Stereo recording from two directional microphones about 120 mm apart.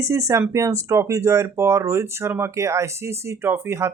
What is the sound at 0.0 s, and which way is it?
Speech, 25° right (ahead or behind).